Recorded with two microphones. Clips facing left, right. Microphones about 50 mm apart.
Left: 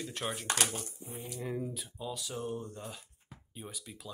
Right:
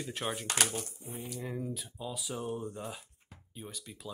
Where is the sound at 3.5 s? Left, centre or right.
Centre.